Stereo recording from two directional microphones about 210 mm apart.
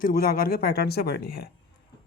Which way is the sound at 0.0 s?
45° left (ahead or behind).